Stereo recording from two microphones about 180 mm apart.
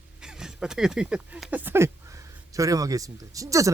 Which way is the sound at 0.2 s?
5° right (ahead or behind).